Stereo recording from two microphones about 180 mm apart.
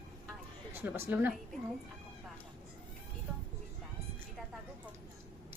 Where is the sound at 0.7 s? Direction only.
10° right (ahead or behind).